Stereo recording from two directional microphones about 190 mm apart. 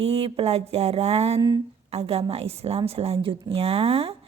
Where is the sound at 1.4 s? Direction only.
20° right (ahead or behind).